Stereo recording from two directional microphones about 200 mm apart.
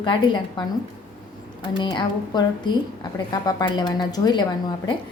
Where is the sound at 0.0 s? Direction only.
25° left (ahead or behind).